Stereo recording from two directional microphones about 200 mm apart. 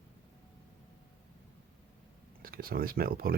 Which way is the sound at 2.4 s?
45° right (ahead or behind).